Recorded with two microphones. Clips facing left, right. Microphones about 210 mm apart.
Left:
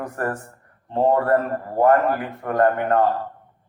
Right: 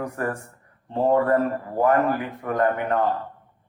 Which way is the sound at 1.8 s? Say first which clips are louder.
Left 3 dB; 50° left (ahead or behind).